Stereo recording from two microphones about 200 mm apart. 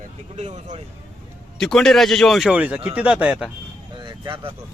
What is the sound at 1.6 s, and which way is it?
Speech, centre (ahead or behind).